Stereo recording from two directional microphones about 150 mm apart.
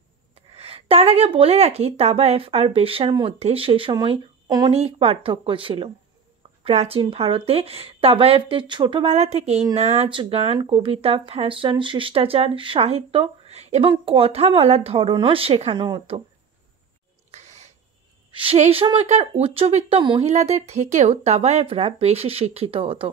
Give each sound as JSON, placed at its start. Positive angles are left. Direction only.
{"t": 0.3, "sound": "a woman's voice", "side_deg": -40}
{"t": 3.3, "sound": "speech", "side_deg": -40}
{"t": 4.7, "sound": "speech", "side_deg": -40}
{"t": 17.3, "sound": "a sound", "side_deg": -45}
{"t": 18.3, "sound": "speech", "side_deg": -40}
{"t": 20.2, "sound": "speech", "side_deg": -45}